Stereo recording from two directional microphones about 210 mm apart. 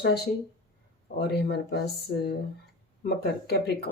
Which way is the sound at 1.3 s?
50° left (ahead or behind).